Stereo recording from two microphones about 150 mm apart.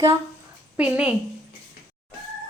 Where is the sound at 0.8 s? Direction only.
5° right (ahead or behind).